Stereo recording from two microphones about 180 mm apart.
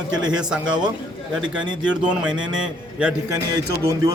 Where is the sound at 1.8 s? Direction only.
5° right (ahead or behind).